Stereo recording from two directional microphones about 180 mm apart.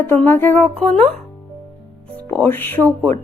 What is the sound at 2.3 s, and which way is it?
Speech, 10° left (ahead or behind).